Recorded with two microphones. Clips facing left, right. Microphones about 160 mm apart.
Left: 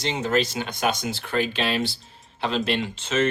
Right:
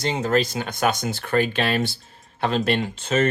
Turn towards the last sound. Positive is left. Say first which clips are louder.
# right 2 dB
turn(degrees=-45)  # may be behind; listen again after turning